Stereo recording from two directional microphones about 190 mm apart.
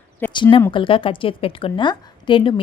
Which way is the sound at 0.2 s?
10° left (ahead or behind).